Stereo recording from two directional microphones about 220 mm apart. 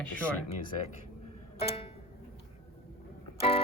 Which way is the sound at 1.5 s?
25° left (ahead or behind).